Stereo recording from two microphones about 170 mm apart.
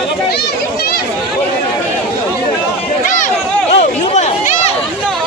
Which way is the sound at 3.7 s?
40° left (ahead or behind).